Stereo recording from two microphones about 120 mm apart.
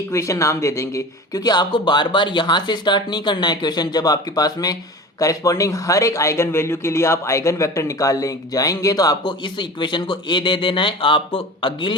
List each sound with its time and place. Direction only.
0.1 s speech: 25° left (ahead or behind); by 11.9 s 45° left (ahead or behind)